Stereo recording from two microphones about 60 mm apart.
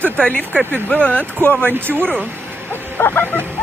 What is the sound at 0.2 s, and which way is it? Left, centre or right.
Speech, left.